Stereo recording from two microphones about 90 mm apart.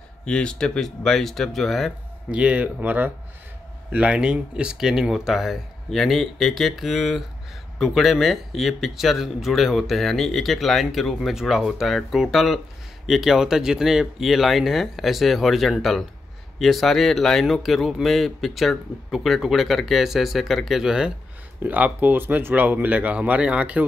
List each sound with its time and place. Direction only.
0.2 s speech: 10° left (ahead or behind)
2.3 s speech: 15° right (ahead or behind)
21.6 s speech: 20° right (ahead or behind)